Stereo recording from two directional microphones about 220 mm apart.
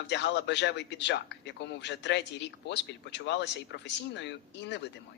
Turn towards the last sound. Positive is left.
turn(degrees=50)  # may be behind; listen again after turning